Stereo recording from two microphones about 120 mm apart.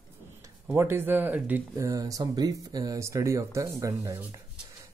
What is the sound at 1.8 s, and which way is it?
Speech, 30° right (ahead or behind).